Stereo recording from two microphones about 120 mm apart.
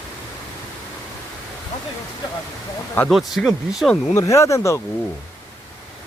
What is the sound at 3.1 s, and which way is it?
Speech, centre (ahead or behind).